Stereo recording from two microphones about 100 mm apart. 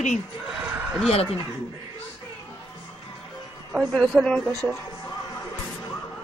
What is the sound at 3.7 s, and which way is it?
Speech, centre (ahead or behind).